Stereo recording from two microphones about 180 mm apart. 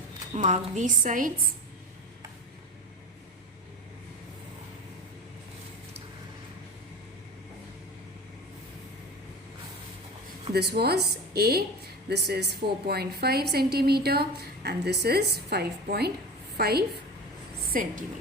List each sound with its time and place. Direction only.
0.3 s a woman's voice: 40° right (ahead or behind)
10.5 s a woman's voice: 60° right (ahead or behind)